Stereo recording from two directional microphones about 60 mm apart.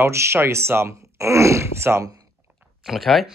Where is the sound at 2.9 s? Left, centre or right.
Centre.